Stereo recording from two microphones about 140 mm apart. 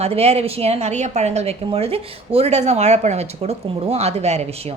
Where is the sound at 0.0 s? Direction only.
50° right (ahead or behind).